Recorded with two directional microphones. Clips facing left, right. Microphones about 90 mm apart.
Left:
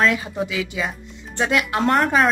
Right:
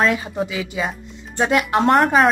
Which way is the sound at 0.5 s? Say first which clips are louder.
Right 1 dB; 30° right (ahead or behind).